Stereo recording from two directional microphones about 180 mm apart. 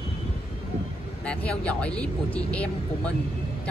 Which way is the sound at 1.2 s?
5° left (ahead or behind).